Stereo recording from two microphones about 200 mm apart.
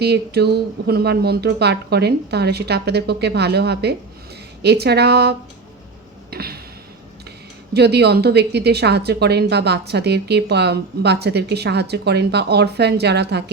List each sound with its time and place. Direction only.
0.0 s a woman's voice: 55° right (ahead or behind)
6.3 s a sound: 50° right (ahead or behind)
7.7 s a woman's voice: 55° right (ahead or behind)